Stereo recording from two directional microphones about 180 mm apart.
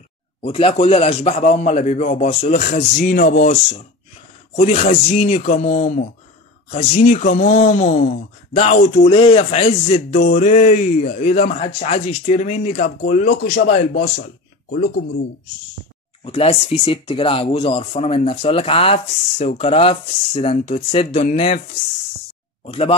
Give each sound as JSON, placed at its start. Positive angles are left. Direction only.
{"t": 0.4, "sound": "speech", "side_deg": 30}
{"t": 8.9, "sound": "speech", "side_deg": 30}
{"t": 16.3, "sound": "speech", "side_deg": 30}
{"t": 22.7, "sound": "speech", "side_deg": 30}